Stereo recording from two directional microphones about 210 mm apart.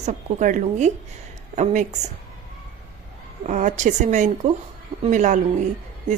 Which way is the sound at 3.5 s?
35° right (ahead or behind).